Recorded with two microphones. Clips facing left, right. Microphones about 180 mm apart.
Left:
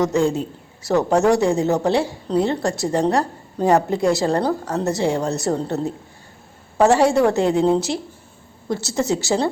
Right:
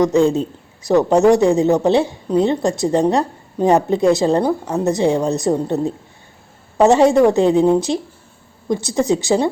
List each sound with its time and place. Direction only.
0.0 s a man's voice: 20° right (ahead or behind)